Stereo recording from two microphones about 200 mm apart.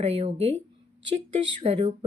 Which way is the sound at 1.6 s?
30° right (ahead or behind).